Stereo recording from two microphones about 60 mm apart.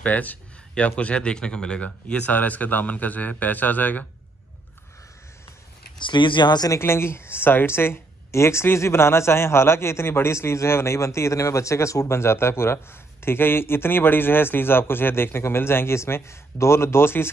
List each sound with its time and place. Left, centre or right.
0.0 s a man's voice: left
6.8 s speech: left